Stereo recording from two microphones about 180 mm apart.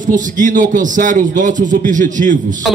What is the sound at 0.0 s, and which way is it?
A man's voice, 45° right (ahead or behind).